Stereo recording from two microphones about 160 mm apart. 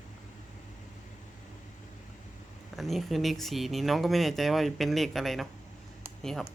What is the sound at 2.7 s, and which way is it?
Speech, centre (ahead or behind).